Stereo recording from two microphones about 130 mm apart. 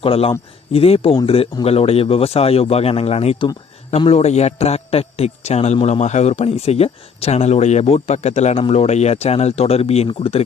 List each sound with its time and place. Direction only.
0.0 s a man's voice: 45° left (ahead or behind)